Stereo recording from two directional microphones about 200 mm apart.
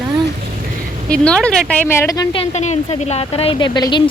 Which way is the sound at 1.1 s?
5° left (ahead or behind).